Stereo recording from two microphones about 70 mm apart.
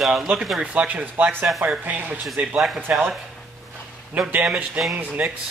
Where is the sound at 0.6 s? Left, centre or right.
Right.